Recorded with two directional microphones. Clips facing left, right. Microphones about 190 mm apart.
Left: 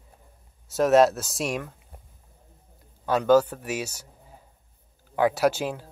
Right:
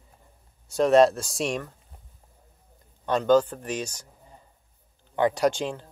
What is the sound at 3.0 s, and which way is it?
Speech, 5° left (ahead or behind).